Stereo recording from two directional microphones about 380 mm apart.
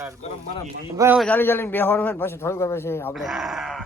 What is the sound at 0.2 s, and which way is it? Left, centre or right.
Speech, centre.